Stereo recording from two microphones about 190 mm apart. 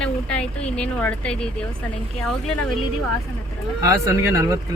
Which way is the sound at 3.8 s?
15° right (ahead or behind).